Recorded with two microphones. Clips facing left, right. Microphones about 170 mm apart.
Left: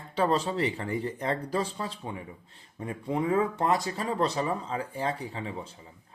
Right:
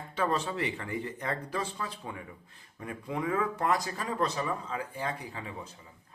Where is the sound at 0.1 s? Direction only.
35° left (ahead or behind).